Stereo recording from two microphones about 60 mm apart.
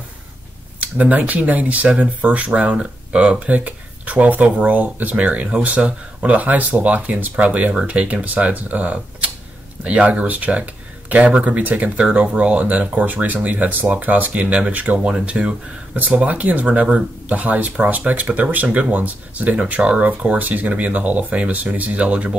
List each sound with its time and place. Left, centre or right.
0.7 s speech: right
15.0 s speech: centre